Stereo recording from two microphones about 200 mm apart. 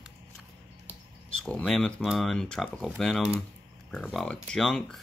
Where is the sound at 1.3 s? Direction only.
5° left (ahead or behind).